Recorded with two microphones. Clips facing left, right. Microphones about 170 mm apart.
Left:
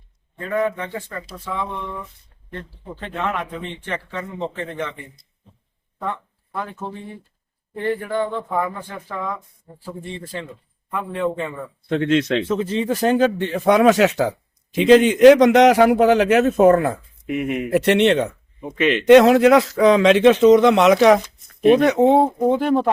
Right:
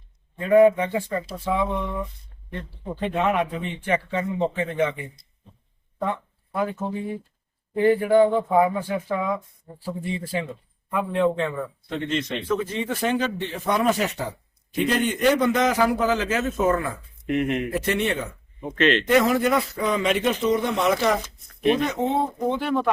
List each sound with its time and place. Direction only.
0.3 s speech: 15° right (ahead or behind)
1.1 s speech: 25° right (ahead or behind)
3.0 s speech: 15° right (ahead or behind)
6.1 s a sound: 10° right (ahead or behind)
7.8 s a man's voice: 10° right (ahead or behind)
11.9 s speech: 75° left (ahead or behind)
12.5 s speech: 30° left (ahead or behind); by 17.0 s 60° left (ahead or behind)
17.2 s speech: 5° left (ahead or behind)
17.7 s speech: 70° left (ahead or behind)
18.6 s speech: 10° left (ahead or behind)
19.0 s speech: 80° left; by 22.9 s 40° left (ahead or behind)